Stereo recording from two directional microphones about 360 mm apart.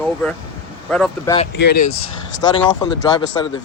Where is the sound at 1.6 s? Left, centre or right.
Left.